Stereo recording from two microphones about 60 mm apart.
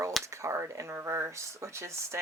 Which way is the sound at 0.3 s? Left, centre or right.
Right.